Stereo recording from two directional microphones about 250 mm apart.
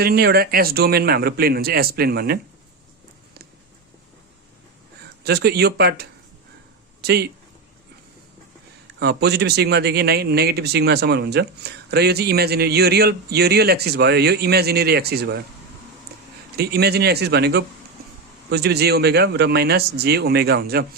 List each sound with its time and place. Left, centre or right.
0.0 s speech: right
5.2 s speech: right
9.0 s speech: right
16.6 s speech: right